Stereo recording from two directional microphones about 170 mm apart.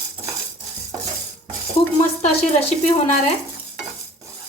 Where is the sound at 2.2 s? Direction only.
40° left (ahead or behind).